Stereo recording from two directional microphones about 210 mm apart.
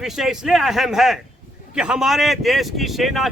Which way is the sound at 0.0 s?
Centre (ahead or behind).